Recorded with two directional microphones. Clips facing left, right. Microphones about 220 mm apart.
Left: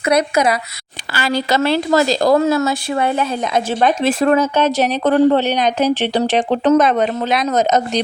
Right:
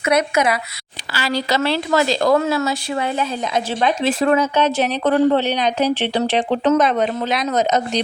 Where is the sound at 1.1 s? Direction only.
50° left (ahead or behind).